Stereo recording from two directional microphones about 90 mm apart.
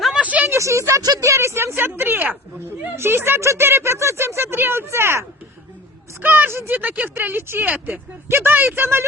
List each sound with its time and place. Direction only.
0.0 s a sound: 10° right (ahead or behind)
0.5 s speech: 35° right (ahead or behind)
6.2 s speech: 20° right (ahead or behind)